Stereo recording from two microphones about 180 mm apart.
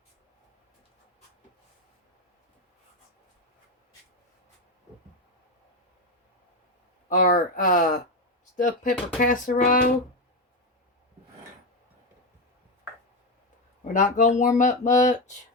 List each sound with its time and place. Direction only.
7.1 s speech: 50° left (ahead or behind)
13.8 s speech: 45° left (ahead or behind)